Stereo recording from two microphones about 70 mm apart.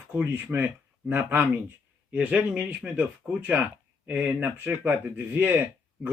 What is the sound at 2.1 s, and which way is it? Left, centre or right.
Speech, centre.